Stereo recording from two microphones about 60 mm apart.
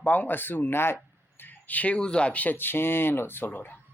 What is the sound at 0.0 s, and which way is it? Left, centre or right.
Speech, left.